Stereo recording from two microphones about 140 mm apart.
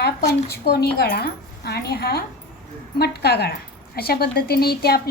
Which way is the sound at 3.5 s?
90° left.